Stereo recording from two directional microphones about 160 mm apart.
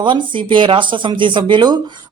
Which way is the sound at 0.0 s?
30° right (ahead or behind).